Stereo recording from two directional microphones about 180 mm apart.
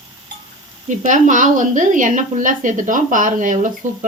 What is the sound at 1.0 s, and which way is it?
Speech, 45° right (ahead or behind).